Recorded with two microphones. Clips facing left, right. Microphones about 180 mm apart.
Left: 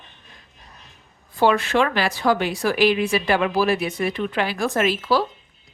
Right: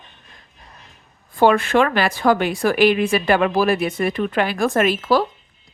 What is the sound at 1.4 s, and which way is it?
Speech, 50° right (ahead or behind).